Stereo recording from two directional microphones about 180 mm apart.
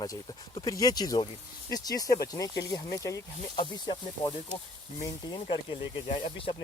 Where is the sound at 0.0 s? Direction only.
20° left (ahead or behind).